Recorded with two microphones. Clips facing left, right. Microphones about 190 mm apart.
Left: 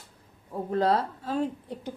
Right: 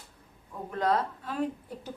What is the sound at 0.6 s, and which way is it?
Speech, 30° left (ahead or behind).